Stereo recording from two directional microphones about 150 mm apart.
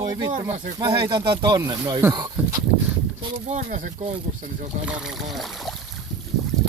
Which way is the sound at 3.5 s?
60° right (ahead or behind).